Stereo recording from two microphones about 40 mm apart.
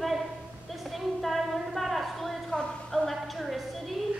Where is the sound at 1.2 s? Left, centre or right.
Centre.